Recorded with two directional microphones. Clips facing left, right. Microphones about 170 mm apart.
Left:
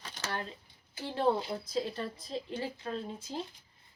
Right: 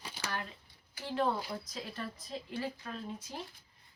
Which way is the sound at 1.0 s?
30° left (ahead or behind).